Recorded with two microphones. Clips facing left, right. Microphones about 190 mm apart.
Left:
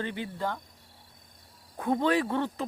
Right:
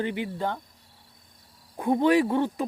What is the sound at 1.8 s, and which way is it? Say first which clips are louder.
Speech: right 5 dB; 15° right (ahead or behind).